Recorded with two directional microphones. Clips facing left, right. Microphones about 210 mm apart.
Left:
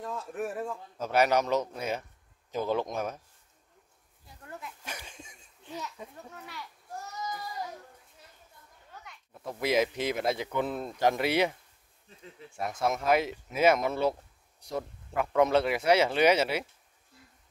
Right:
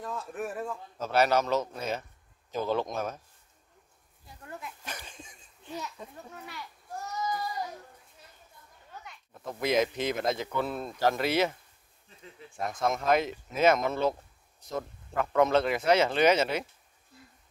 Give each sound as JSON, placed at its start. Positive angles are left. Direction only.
{"t": 0.0, "sound": "a man's voice", "side_deg": 25}
{"t": 1.0, "sound": "speech", "side_deg": 15}
{"t": 4.5, "sound": "speech", "side_deg": -15}
{"t": 4.8, "sound": "a sound", "side_deg": 10}
{"t": 6.3, "sound": "a child's voice", "side_deg": -15}
{"t": 9.5, "sound": "speech", "side_deg": 10}
{"t": 12.5, "sound": "speech", "side_deg": 10}